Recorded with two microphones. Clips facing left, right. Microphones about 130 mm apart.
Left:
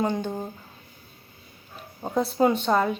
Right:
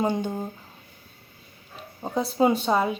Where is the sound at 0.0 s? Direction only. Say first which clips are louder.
Right 1 dB; 10° right (ahead or behind).